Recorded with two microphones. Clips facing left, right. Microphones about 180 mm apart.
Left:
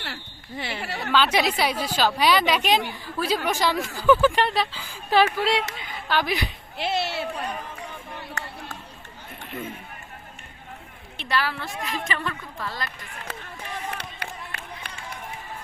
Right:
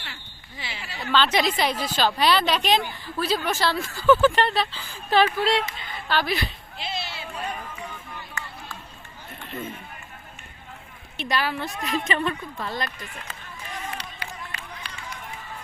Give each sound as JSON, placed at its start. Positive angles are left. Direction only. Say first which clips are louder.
{"t": 0.0, "sound": "a sound", "louder": "left 6 dB", "side_deg": 60}
{"t": 1.1, "sound": "speech", "louder": "even", "side_deg": 10}
{"t": 6.7, "sound": "a sound", "louder": "left 8 dB", "side_deg": 70}
{"t": 9.5, "sound": "speech", "louder": "even", "side_deg": 10}
{"t": 11.2, "sound": "a woman's voice", "louder": "right 1 dB", "side_deg": -15}
{"t": 13.3, "sound": "run", "louder": "left 3 dB", "side_deg": 70}